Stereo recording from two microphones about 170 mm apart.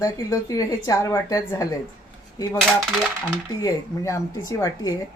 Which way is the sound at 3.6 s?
20° left (ahead or behind).